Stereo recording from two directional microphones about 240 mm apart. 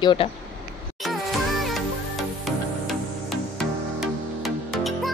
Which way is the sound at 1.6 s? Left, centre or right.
Centre.